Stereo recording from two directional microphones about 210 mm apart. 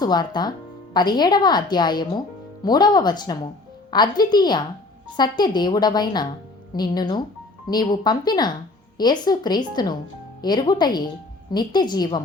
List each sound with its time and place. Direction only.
0.0 s a woman's voice: 20° left (ahead or behind)